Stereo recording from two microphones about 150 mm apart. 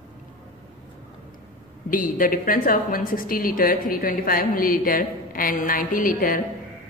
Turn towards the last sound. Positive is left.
turn(degrees=70)  # may be behind; listen again after turning